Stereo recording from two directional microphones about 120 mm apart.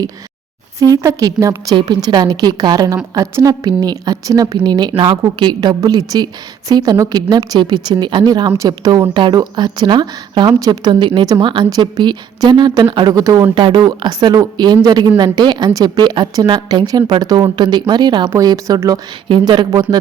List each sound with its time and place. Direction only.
0.8 s a woman's voice: 30° right (ahead or behind)
13.6 s a woman's voice: 40° right (ahead or behind)